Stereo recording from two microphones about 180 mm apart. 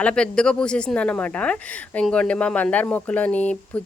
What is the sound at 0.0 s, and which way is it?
Speech, 5° left (ahead or behind).